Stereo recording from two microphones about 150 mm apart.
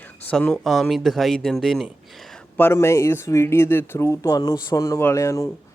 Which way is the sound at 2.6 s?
15° left (ahead or behind).